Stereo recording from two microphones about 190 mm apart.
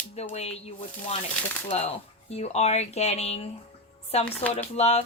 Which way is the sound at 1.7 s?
35° left (ahead or behind).